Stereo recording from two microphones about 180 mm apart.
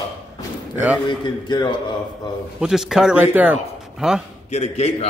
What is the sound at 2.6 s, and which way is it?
A man's voice, 5° right (ahead or behind).